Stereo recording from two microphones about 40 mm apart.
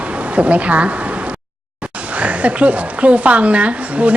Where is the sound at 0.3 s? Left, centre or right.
Right.